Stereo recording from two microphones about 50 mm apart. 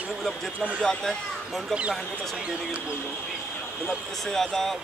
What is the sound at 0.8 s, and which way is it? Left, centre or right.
Speech, centre.